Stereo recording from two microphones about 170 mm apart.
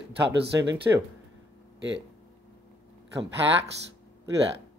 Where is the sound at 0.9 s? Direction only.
15° right (ahead or behind).